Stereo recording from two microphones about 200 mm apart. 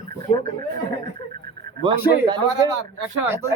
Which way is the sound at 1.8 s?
20° right (ahead or behind).